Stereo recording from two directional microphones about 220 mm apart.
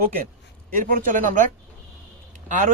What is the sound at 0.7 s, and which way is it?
Speech, 40° right (ahead or behind).